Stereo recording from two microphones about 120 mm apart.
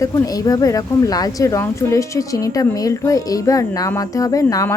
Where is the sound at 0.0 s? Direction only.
30° left (ahead or behind).